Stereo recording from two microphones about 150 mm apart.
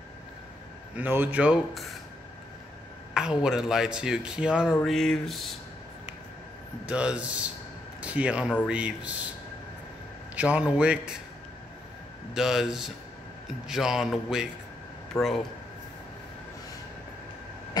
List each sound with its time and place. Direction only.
0.9 s speech: 10° right (ahead or behind)
3.2 s speech: 5° right (ahead or behind)
6.9 s speech: 5° right (ahead or behind)
10.3 s speech: 10° right (ahead or behind)
12.4 s speech: 5° right (ahead or behind)
15.2 s speech: 20° left (ahead or behind)